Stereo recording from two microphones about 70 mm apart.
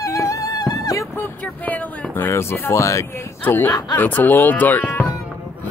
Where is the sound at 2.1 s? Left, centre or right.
Left.